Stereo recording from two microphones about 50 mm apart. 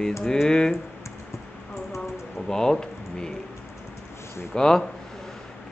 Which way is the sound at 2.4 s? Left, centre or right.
Centre.